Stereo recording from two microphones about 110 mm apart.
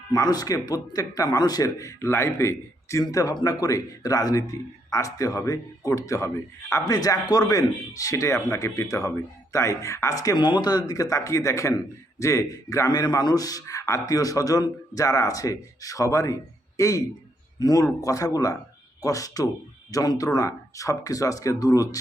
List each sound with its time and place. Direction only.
0.1 s a man's voice: 35° left (ahead or behind)
10.3 s speech: 40° left (ahead or behind)